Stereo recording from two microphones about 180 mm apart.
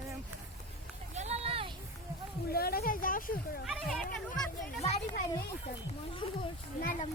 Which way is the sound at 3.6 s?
Centre (ahead or behind).